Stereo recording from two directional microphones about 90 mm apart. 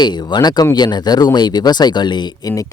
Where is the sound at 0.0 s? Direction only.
55° left (ahead or behind).